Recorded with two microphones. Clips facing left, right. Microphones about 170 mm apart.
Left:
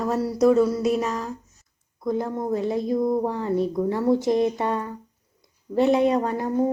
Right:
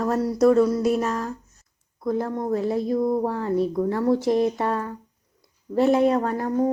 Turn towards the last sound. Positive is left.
turn(degrees=20)  # may be behind; listen again after turning